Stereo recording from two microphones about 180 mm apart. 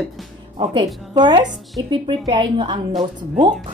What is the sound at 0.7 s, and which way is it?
A woman's voice, 25° right (ahead or behind).